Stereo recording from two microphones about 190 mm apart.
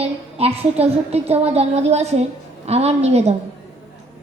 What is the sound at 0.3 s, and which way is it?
A woman's voice, 30° right (ahead or behind).